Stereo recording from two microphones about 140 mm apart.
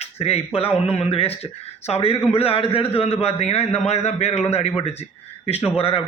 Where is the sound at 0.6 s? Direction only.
45° left (ahead or behind).